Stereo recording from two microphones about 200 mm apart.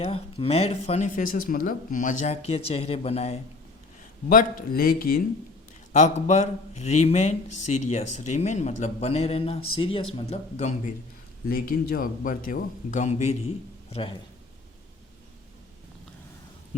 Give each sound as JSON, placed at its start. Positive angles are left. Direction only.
{"t": 0.0, "sound": "speech", "side_deg": 30}
{"t": 4.3, "sound": "speech", "side_deg": 45}
{"t": 5.9, "sound": "speech", "side_deg": 35}
{"t": 11.4, "sound": "a man's voice", "side_deg": 45}